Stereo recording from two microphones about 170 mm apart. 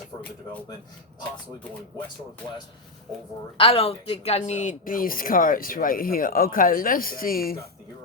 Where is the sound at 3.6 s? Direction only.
35° left (ahead or behind); by 7.7 s 60° left (ahead or behind).